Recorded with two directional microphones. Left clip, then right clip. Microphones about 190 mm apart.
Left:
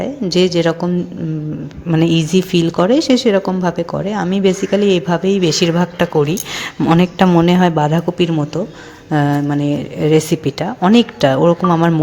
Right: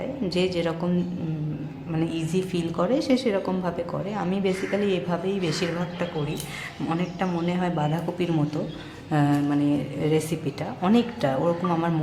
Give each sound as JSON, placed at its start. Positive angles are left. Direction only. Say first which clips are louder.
{"t": 0.0, "sound": "speech", "louder": "left 11 dB", "side_deg": 35}
{"t": 1.9, "sound": "speech", "louder": "left 13 dB", "side_deg": 40}
{"t": 6.8, "sound": "a man's voice", "louder": "left 15 dB", "side_deg": 55}